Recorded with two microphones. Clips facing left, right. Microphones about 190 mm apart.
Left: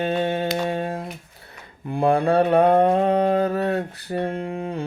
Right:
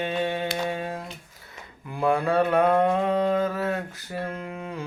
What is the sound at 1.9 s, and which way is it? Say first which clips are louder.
Mantra: left 4 dB; 30° left (ahead or behind).